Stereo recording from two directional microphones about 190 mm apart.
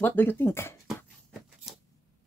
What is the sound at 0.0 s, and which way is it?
Speech, 10° left (ahead or behind).